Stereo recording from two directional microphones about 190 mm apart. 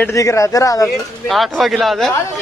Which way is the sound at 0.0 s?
15° left (ahead or behind).